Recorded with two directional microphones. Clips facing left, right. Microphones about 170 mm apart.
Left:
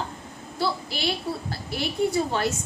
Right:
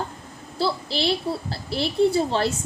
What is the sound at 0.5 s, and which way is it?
A child's voice, 30° right (ahead or behind).